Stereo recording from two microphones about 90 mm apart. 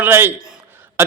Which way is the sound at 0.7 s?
25° right (ahead or behind).